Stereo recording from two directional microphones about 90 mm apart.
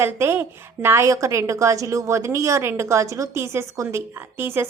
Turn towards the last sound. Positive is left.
turn(degrees=-25)  # may be behind; listen again after turning